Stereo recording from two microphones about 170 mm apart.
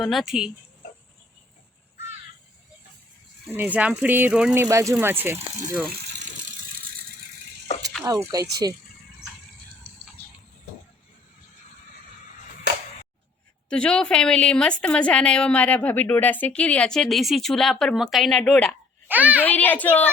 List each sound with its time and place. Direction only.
0.0 s a woman's voice: centre (ahead or behind)
3.5 s speech: 10° right (ahead or behind)
8.0 s speech: 20° right (ahead or behind)
13.7 s a woman's voice: 5° left (ahead or behind)
19.0 s a child's voice: 10° right (ahead or behind)
19.5 s a child's voice: 10° left (ahead or behind)